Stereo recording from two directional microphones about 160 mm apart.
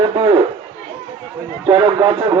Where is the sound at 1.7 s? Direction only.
30° right (ahead or behind).